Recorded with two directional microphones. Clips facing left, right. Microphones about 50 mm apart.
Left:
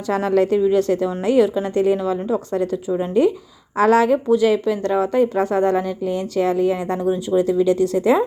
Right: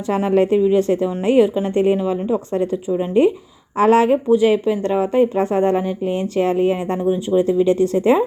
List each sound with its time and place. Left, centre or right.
0.1 s speech: right
3.2 s speech: right